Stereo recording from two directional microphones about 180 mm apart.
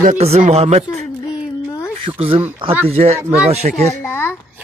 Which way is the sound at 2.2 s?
30° right (ahead or behind).